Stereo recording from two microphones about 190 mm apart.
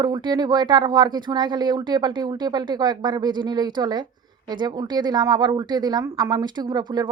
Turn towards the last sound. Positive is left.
turn(degrees=-25)  # may be behind; listen again after turning